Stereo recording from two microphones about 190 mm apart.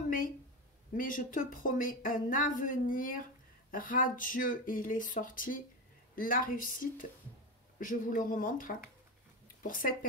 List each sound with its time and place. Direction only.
0.9 s speech: 45° left (ahead or behind)